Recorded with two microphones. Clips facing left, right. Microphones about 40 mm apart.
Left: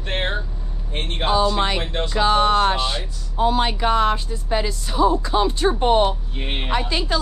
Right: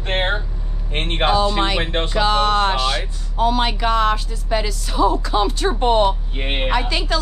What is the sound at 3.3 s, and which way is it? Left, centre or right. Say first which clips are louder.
Speech: right 1 dB; right.